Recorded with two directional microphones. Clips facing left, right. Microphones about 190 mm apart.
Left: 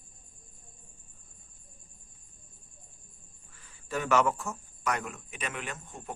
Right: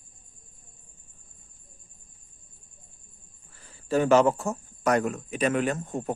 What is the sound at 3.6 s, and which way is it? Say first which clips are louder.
Speech: right 10 dB; 35° right (ahead or behind).